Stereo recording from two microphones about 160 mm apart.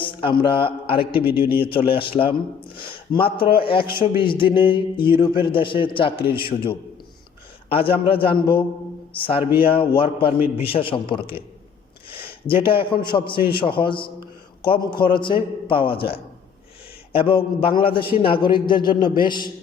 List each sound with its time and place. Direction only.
0.0 s a man's voice: 30° left (ahead or behind)